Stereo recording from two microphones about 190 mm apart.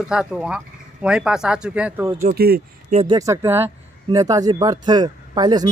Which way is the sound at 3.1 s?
15° right (ahead or behind).